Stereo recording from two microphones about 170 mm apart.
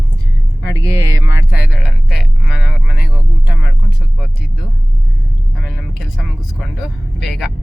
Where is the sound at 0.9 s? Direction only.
10° right (ahead or behind).